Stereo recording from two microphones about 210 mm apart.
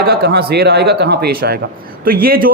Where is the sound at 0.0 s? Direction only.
50° right (ahead or behind).